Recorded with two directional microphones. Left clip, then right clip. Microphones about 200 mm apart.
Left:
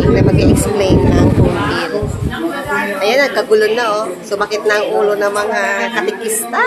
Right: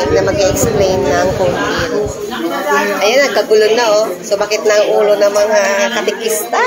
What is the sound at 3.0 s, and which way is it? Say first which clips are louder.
Speech: left 1 dB; 5° left (ahead or behind).